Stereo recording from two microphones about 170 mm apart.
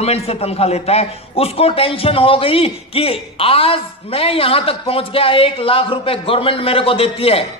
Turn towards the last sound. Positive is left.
turn(degrees=35)  # may be behind; listen again after turning